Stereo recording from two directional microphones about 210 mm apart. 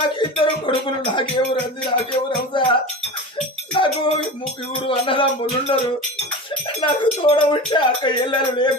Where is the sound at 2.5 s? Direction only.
20° left (ahead or behind).